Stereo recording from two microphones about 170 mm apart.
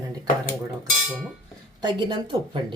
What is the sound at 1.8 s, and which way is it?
Speech, 25° right (ahead or behind).